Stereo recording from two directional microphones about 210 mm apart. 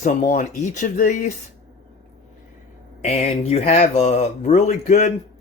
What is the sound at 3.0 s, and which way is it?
Speech, 30° left (ahead or behind).